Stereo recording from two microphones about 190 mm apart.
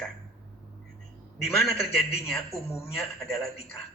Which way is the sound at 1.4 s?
5° left (ahead or behind).